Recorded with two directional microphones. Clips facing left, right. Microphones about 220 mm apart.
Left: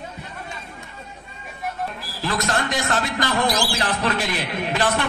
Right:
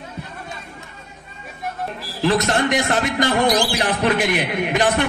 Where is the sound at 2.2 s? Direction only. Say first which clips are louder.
Right 6 dB; 20° right (ahead or behind).